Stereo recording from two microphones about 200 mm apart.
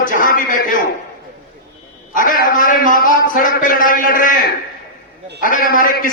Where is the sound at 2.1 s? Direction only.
40° left (ahead or behind).